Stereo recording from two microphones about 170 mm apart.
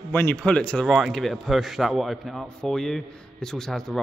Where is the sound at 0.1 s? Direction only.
10° left (ahead or behind).